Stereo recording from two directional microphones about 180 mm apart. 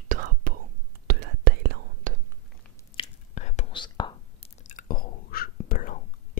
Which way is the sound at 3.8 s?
25° left (ahead or behind).